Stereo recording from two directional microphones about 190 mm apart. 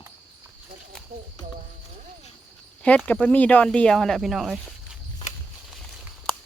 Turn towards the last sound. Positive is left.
turn(degrees=0)  # may be behind; listen again after turning